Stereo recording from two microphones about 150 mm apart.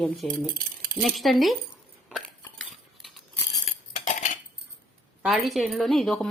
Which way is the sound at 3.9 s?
55° left (ahead or behind).